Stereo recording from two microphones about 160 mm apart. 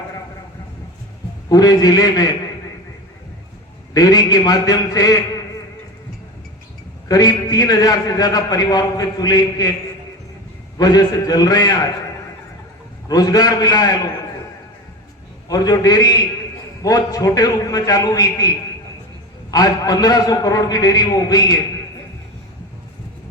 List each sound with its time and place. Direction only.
1.5 s a man's voice: 25° left (ahead or behind)
3.9 s a man's voice: 25° left (ahead or behind)
7.1 s a man's voice: 25° left (ahead or behind)
10.8 s a man's voice: 25° left (ahead or behind)
13.1 s a man's voice: 25° left (ahead or behind)
15.4 s a man's voice: 25° left (ahead or behind)